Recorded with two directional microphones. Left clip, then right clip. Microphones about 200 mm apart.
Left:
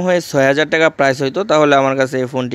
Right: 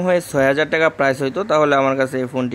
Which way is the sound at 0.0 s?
40° left (ahead or behind).